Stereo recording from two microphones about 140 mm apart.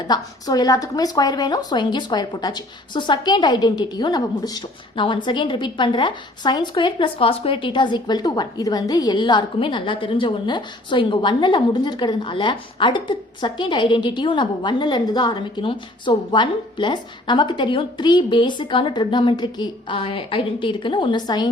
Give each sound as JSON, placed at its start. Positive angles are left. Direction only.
{"t": 0.1, "sound": "a woman's voice", "side_deg": 25}